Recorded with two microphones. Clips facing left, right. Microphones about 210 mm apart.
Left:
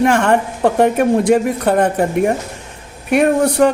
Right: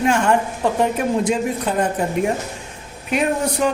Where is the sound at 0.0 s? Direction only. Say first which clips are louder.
Left 4 dB; 65° left (ahead or behind).